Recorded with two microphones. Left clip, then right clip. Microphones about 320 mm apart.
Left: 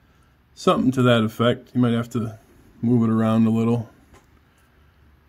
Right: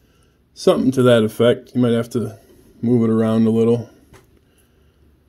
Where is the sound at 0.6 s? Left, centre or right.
Centre.